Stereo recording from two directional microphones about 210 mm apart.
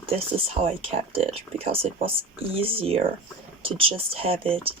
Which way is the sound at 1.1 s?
30° right (ahead or behind).